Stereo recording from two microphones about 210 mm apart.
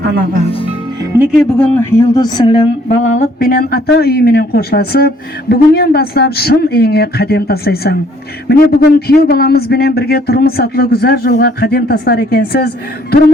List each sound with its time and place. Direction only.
0.0 s speech: 50° right (ahead or behind)
1.1 s speech: 10° right (ahead or behind)
1.5 s a woman's voice: 5° left (ahead or behind); by 13.1 s 50° left (ahead or behind)